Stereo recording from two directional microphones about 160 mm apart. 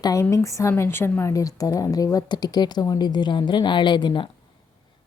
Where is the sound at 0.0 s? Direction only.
20° left (ahead or behind).